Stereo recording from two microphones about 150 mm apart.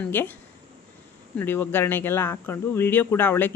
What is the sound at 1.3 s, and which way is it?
Speech, 15° left (ahead or behind).